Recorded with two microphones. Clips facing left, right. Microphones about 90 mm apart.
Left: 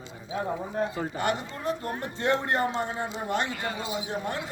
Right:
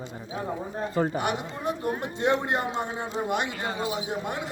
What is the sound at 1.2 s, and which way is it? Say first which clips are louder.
A man's voice: even; 15° right (ahead or behind).